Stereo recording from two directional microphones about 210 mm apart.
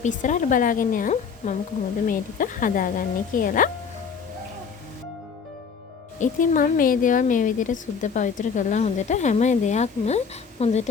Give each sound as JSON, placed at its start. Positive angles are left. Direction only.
{"t": 0.0, "sound": "speech", "side_deg": 40}
{"t": 6.1, "sound": "speech", "side_deg": 35}